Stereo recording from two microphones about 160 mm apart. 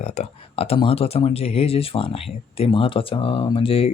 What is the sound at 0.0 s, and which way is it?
Speech, 45° left (ahead or behind).